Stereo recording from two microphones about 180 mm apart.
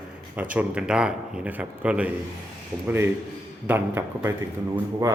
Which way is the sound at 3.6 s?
10° right (ahead or behind).